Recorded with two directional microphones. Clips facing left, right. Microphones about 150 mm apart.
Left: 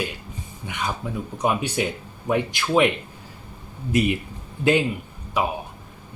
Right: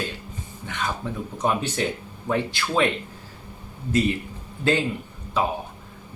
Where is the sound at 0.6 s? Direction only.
10° left (ahead or behind).